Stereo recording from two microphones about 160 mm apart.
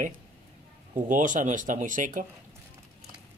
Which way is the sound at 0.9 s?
55° right (ahead or behind).